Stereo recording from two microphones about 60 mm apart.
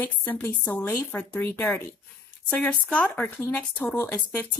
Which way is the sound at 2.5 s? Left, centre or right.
Left.